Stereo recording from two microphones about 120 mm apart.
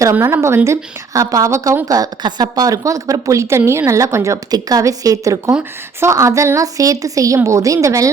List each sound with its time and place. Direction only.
0.0 s a woman's voice: 20° right (ahead or behind)